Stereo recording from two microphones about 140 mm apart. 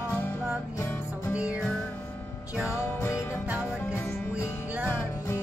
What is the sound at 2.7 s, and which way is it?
Music, 20° left (ahead or behind).